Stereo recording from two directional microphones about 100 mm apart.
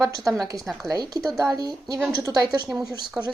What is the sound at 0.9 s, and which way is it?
Speech, 40° right (ahead or behind).